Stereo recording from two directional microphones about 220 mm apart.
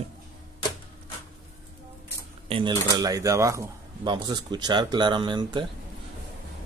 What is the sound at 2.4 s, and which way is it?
Typewriter, 25° right (ahead or behind).